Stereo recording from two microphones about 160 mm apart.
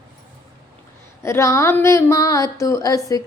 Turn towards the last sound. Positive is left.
turn(degrees=20)  # may be behind; listen again after turning